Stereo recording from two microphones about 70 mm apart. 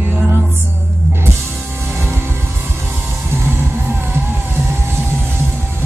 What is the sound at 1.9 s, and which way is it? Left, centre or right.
Vehicle, right.